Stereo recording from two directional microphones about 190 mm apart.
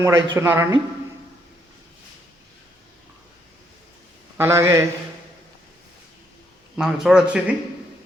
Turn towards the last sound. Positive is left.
turn(degrees=-5)  # may be behind; listen again after turning